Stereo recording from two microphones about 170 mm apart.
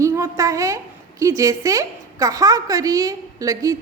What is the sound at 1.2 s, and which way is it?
A woman's voice, 20° right (ahead or behind).